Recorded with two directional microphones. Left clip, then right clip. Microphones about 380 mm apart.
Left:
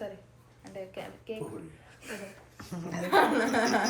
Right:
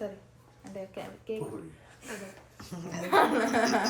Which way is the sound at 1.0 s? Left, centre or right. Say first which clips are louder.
Right 4 dB; right.